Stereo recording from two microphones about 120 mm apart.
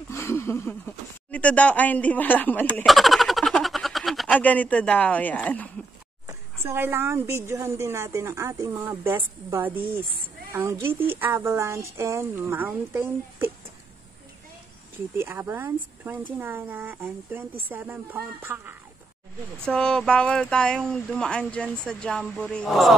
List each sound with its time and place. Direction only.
0.1 s speech: 20° left (ahead or behind)
2.9 s a sound: centre (ahead or behind)
4.3 s speech: 10° left (ahead or behind)
6.2 s a woman's voice: 20° right (ahead or behind)
15.1 s speech: 20° right (ahead or behind)
19.7 s speech: 5° left (ahead or behind)